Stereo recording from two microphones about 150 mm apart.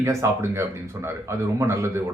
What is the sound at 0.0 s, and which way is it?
A man's voice, 20° right (ahead or behind).